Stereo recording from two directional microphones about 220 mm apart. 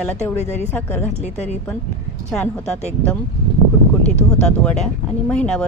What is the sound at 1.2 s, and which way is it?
Speech, 30° left (ahead or behind).